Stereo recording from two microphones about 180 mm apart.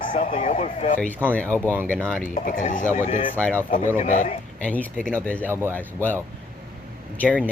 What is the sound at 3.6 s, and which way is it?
Speech, 50° left (ahead or behind).